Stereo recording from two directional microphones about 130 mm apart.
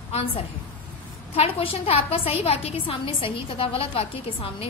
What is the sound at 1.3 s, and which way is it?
A woman's voice, 45° left (ahead or behind).